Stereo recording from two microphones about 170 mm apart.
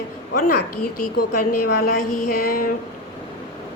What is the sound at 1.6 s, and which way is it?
A woman's voice, 55° left (ahead or behind).